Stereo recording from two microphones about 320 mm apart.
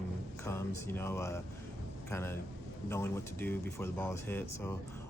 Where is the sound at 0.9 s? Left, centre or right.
Centre.